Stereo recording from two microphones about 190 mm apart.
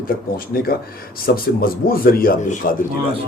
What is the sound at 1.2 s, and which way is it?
A man's voice, 50° left (ahead or behind).